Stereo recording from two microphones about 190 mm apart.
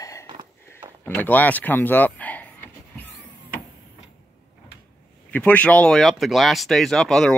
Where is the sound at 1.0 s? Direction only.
10° left (ahead or behind).